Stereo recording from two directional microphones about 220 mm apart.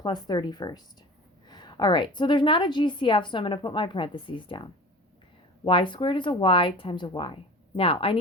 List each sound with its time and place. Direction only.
0.0 s a woman's voice: 20° left (ahead or behind)
5.6 s a woman's voice: 20° left (ahead or behind)